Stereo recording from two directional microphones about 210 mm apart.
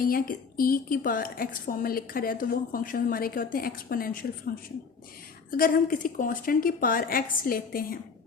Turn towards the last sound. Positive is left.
turn(degrees=45)  # may be behind; listen again after turning